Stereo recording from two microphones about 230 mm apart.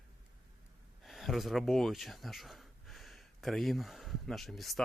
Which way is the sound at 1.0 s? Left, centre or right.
Centre.